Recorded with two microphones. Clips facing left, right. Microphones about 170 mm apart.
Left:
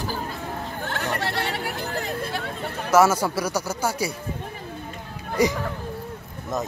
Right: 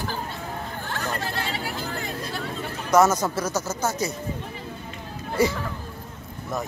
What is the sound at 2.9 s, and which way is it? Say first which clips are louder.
Speech: left 1 dB; 10° left (ahead or behind).